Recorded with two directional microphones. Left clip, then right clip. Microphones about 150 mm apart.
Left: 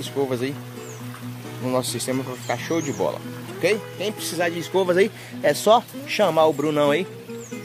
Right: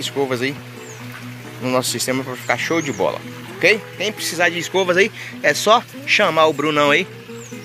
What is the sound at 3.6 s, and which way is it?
A man's voice, 15° left (ahead or behind).